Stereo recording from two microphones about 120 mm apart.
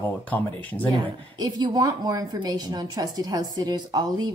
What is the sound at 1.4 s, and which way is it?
A woman's voice, 35° right (ahead or behind).